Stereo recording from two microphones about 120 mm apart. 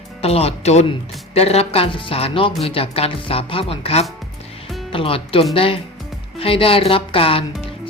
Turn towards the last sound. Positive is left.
turn(degrees=50)  # may be behind; listen again after turning